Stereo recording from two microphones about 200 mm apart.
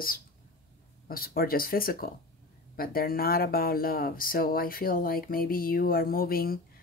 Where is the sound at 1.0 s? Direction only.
45° left (ahead or behind).